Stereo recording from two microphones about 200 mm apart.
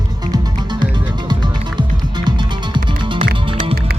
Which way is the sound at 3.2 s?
40° right (ahead or behind).